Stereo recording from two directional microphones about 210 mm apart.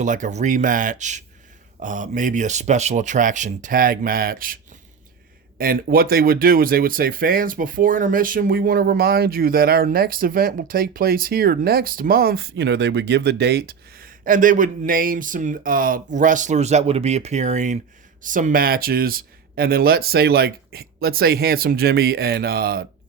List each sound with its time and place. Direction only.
0.0 s speech: 35° right (ahead or behind)